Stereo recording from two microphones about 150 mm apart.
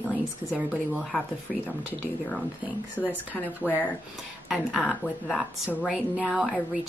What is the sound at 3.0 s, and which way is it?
Speech, 5° left (ahead or behind).